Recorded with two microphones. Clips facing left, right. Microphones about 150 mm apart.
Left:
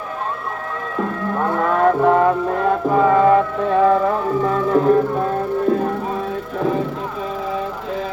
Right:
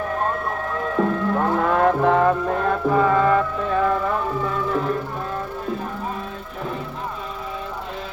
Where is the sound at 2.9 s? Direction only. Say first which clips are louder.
Left 5 dB; 15° left (ahead or behind).